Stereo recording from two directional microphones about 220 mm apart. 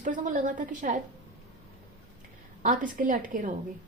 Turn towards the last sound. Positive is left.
turn(degrees=-35)  # may be behind; listen again after turning